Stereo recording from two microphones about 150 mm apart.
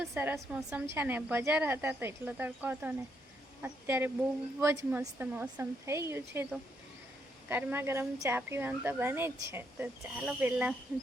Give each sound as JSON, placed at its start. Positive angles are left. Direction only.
{"t": 0.1, "sound": "speech", "side_deg": -15}